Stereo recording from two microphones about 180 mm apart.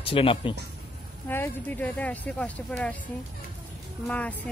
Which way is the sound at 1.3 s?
10° left (ahead or behind).